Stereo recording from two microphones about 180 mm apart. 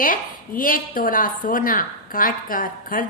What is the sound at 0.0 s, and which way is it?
A woman's voice, 50° left (ahead or behind).